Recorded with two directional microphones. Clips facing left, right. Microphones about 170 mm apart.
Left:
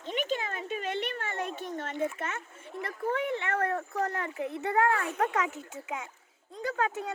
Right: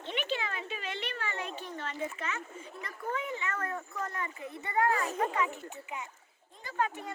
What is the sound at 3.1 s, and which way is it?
Speech, 65° left (ahead or behind).